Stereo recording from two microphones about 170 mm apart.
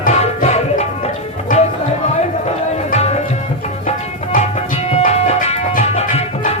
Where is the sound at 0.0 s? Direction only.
40° left (ahead or behind).